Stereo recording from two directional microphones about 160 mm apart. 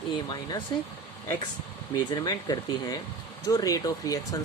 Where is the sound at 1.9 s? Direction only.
25° left (ahead or behind).